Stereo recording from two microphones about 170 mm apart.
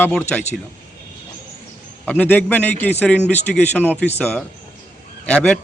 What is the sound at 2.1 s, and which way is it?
A man's voice, 10° left (ahead or behind).